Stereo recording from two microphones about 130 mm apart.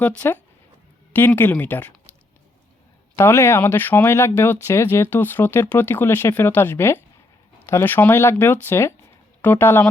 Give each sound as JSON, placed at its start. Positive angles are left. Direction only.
{"t": 1.1, "sound": "speech", "side_deg": 15}
{"t": 3.2, "sound": "speech", "side_deg": 20}